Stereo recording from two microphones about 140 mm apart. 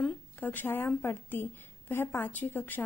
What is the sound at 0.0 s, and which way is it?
A woman's voice, 15° left (ahead or behind).